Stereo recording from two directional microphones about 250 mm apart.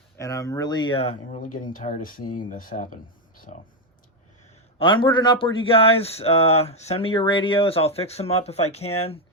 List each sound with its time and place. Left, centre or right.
0.2 s speech: centre
1.5 s speech: left
4.8 s speech: centre